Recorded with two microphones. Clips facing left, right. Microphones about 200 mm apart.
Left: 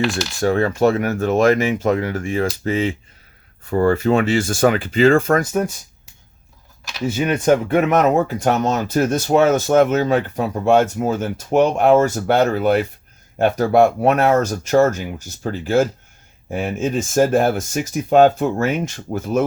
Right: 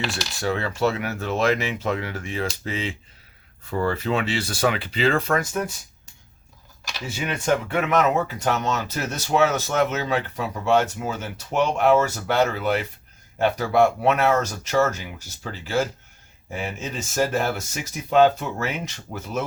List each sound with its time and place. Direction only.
0.1 s speech: 45° left (ahead or behind)
7.1 s speech: 50° left (ahead or behind)